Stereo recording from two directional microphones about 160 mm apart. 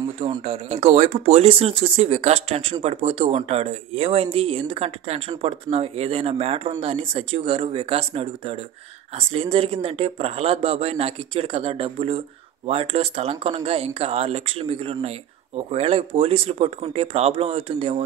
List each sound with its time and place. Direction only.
0.5 s speech: 40° right (ahead or behind)